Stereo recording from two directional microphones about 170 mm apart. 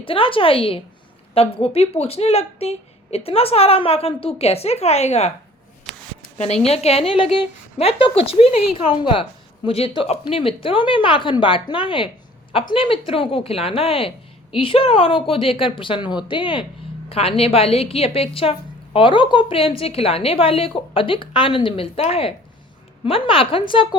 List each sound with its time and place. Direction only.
0.0 s speech: 30° left (ahead or behind)
6.3 s speech: 40° left (ahead or behind)